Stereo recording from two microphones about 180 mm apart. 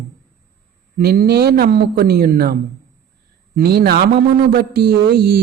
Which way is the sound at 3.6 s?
60° right (ahead or behind).